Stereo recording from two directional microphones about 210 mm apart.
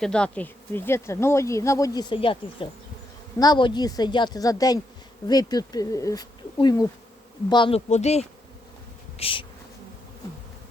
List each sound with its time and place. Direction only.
0.0 s speech: 5° left (ahead or behind); by 8.3 s 30° left (ahead or behind)
9.1 s bee: 25° left (ahead or behind)